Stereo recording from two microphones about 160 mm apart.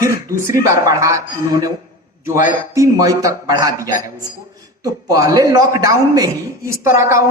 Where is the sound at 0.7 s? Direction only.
20° right (ahead or behind).